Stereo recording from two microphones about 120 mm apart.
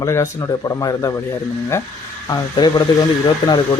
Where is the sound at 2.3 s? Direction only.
35° left (ahead or behind).